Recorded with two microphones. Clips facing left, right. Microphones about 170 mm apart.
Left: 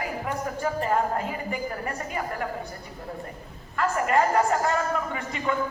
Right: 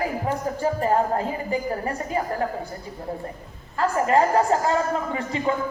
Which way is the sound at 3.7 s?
30° right (ahead or behind).